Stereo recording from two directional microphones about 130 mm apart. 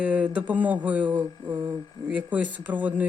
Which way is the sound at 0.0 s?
10° right (ahead or behind).